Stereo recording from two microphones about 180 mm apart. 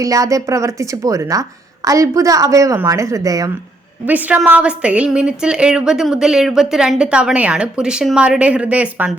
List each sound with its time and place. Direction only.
0.0 s a woman's voice: 20° right (ahead or behind)
4.0 s a woman's voice: 10° right (ahead or behind)